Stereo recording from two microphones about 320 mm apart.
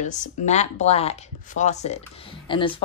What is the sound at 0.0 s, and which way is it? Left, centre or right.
Speech, left.